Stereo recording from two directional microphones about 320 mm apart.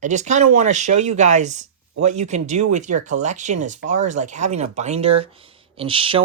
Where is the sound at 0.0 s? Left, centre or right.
Right.